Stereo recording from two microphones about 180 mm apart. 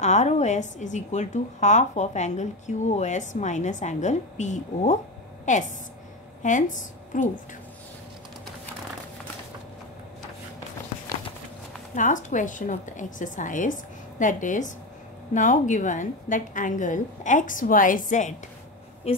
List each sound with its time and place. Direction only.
0.0 s a woman's voice: 40° left (ahead or behind)
11.9 s a woman's voice: 45° left (ahead or behind)
19.1 s a woman's voice: 35° left (ahead or behind)